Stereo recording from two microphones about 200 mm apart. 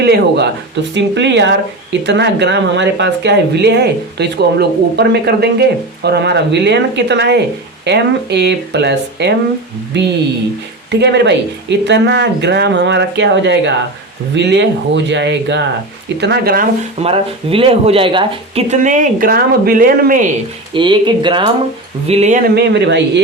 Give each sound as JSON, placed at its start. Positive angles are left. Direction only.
{"t": 0.0, "sound": "speech", "side_deg": -55}
{"t": 17.0, "sound": "speech", "side_deg": -30}
{"t": 20.7, "sound": "speech", "side_deg": -25}